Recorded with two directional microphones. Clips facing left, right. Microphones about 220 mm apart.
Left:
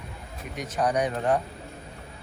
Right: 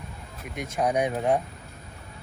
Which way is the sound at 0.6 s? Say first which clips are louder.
Even; 10° right (ahead or behind).